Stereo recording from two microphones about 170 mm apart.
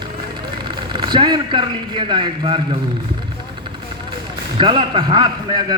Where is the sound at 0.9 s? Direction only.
25° right (ahead or behind).